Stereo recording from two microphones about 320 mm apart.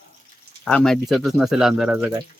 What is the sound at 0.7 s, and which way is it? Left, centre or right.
Speech, centre.